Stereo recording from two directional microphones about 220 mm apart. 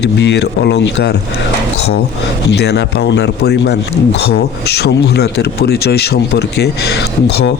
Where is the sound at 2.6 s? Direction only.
50° left (ahead or behind).